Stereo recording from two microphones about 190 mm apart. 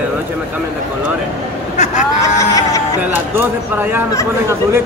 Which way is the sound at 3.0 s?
10° right (ahead or behind).